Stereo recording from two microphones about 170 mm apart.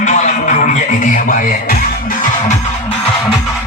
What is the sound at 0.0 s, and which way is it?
Music, 45° left (ahead or behind).